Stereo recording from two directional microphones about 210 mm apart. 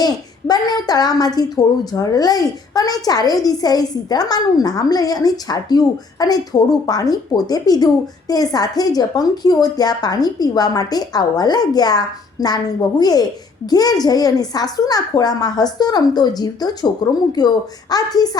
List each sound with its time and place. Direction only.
0.0 s a woman's voice: 20° left (ahead or behind)